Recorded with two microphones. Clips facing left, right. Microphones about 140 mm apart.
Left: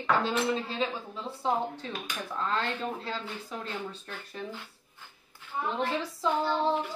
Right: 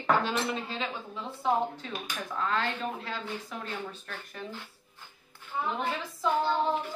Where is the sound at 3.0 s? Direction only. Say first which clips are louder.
Even; 30° left (ahead or behind).